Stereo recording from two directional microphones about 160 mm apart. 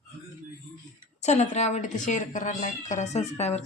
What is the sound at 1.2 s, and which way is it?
A woman's voice, 45° left (ahead or behind).